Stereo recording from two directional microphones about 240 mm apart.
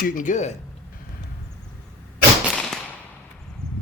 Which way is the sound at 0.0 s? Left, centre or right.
Left.